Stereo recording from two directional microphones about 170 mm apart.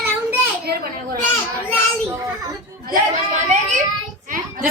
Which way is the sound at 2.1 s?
20° right (ahead or behind).